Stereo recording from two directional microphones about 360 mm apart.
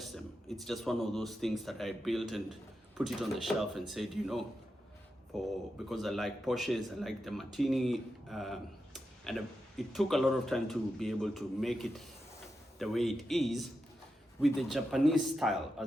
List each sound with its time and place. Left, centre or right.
0.0 s speech: centre